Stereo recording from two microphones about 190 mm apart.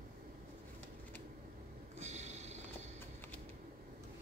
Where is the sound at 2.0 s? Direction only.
35° right (ahead or behind).